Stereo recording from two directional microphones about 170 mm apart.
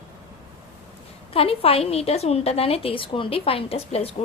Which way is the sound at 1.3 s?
35° left (ahead or behind).